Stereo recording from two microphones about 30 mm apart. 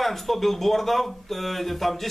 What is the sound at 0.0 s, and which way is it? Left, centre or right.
Speech, centre.